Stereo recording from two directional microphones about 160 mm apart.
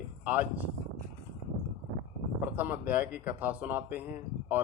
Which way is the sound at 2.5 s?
10° right (ahead or behind).